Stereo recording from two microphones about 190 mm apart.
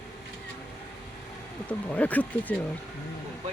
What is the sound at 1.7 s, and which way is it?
Speech, 10° left (ahead or behind).